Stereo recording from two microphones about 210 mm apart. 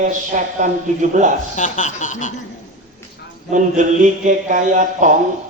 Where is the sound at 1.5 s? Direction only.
35° left (ahead or behind).